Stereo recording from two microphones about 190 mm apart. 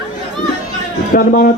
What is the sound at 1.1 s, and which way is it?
Speech, 50° left (ahead or behind).